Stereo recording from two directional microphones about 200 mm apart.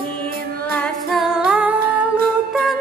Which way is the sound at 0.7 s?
Centre (ahead or behind).